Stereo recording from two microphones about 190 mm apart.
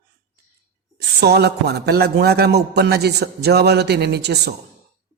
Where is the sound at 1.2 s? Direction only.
60° right (ahead or behind).